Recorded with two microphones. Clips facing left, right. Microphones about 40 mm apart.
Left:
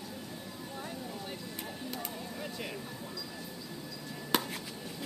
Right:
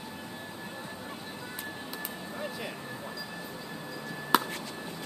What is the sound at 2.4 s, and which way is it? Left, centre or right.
Vehicle, centre.